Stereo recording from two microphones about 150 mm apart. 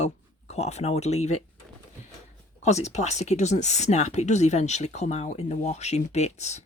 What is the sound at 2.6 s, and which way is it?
Speech, 50° left (ahead or behind).